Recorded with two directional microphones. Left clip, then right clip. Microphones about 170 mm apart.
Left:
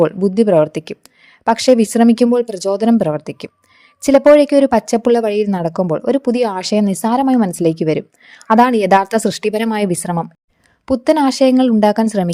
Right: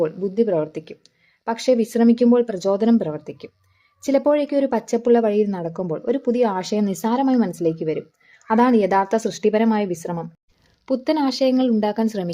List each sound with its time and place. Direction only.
0.0 s a woman's voice: 40° left (ahead or behind)